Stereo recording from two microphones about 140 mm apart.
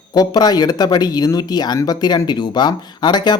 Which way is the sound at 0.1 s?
30° left (ahead or behind).